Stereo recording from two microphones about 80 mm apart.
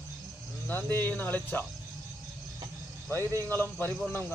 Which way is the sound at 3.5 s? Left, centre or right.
Left.